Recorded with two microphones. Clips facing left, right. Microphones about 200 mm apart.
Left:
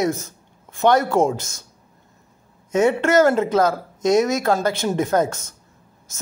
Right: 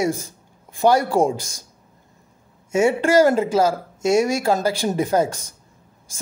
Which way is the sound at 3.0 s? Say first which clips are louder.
Right 3 dB; 30° right (ahead or behind).